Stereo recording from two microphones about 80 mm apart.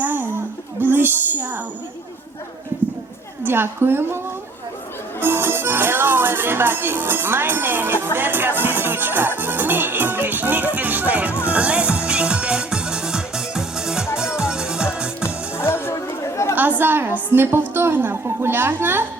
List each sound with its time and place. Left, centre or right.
0.0 s a sound: right
3.4 s a woman's voice: right
5.2 s music: right; by 15.1 s centre
15.2 s chatter: left
16.6 s a sound: right
17.3 s a woman's voice: right